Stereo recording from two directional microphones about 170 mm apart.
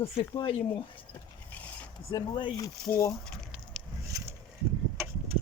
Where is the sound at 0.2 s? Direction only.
30° left (ahead or behind).